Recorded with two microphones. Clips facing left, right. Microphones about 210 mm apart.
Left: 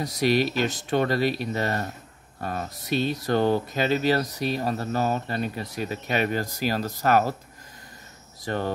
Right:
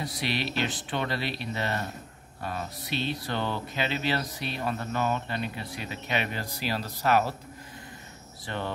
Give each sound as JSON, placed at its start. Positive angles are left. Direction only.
{"t": 0.0, "sound": "speech", "side_deg": 45}
{"t": 8.5, "sound": "speech", "side_deg": 45}